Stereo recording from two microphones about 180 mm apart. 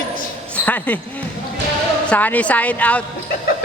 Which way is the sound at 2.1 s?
10° left (ahead or behind).